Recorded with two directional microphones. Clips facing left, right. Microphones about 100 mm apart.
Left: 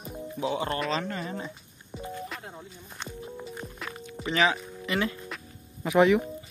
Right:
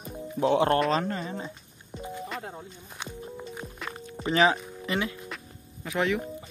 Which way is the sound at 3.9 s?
35° right (ahead or behind).